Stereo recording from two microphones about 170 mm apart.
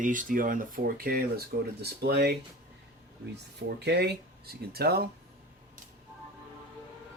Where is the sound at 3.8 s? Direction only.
75° right (ahead or behind).